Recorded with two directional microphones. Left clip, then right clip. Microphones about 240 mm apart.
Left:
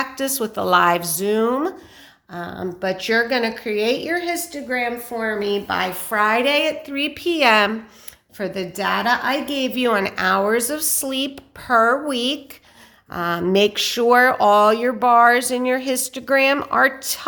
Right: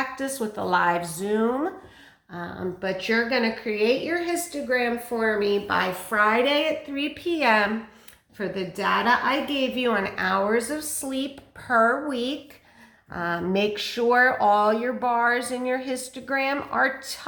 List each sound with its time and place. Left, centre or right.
0.0 s speech: left